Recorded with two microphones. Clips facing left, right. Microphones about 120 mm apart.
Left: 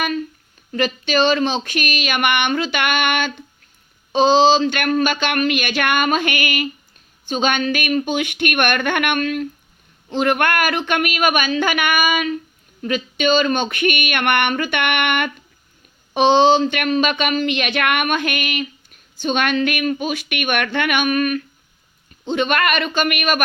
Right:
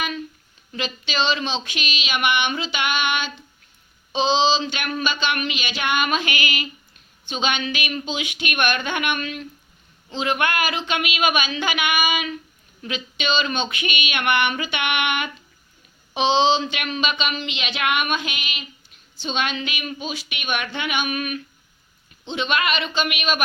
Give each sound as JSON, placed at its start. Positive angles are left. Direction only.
{"t": 0.7, "sound": "speech", "side_deg": 50}